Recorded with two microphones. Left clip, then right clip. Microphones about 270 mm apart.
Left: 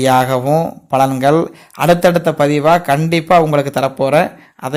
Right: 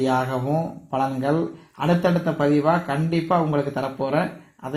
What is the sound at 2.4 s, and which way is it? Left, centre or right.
Speech, left.